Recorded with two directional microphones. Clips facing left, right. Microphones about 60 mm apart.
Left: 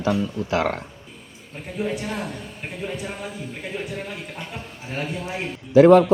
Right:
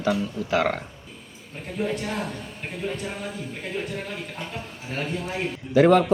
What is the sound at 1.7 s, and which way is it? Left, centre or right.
A man's voice, centre.